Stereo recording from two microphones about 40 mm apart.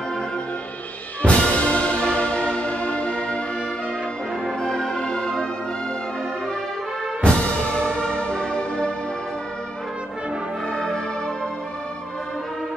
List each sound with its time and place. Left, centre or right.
1.2 s music: left
4.5 s music: centre
7.2 s music: left
10.7 s brass instrument: left